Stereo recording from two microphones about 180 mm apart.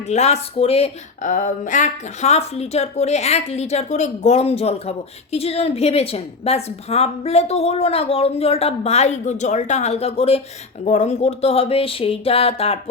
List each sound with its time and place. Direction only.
0.1 s speech: 35° left (ahead or behind)